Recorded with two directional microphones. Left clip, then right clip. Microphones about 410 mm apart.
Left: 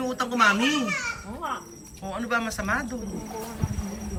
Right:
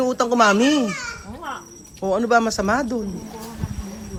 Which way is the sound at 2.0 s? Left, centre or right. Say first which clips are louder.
Right 10 dB; centre.